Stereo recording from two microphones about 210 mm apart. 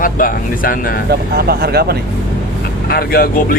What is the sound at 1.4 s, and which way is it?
Speech, 50° right (ahead or behind).